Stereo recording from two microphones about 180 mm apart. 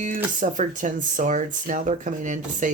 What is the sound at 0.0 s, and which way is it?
Speech, 45° right (ahead or behind).